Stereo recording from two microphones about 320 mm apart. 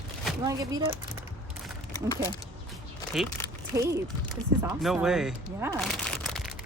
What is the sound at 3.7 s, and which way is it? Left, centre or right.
Speech, centre.